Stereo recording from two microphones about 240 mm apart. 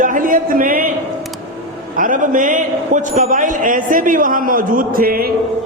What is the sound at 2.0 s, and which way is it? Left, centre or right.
A man's voice, right.